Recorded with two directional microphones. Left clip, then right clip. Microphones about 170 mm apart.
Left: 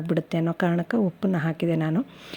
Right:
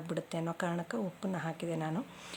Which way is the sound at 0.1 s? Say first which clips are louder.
Left 11 dB; 35° left (ahead or behind).